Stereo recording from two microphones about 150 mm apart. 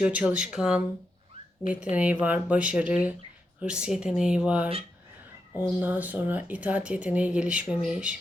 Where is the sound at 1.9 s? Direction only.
10° right (ahead or behind).